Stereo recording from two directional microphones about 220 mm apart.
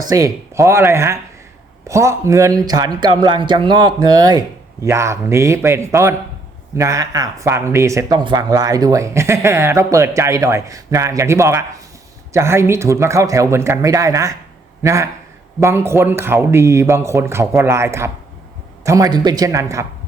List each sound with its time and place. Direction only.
0.1 s speech: 15° right (ahead or behind)